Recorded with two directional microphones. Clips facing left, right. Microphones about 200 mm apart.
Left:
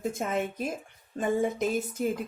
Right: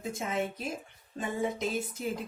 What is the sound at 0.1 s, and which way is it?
A woman's voice, 50° left (ahead or behind).